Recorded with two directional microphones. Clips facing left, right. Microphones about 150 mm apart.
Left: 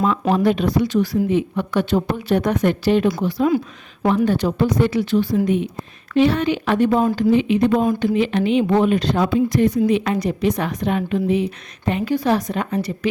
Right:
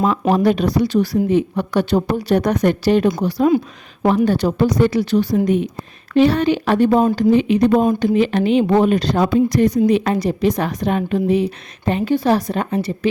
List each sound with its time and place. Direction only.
0.0 s speech: 35° right (ahead or behind)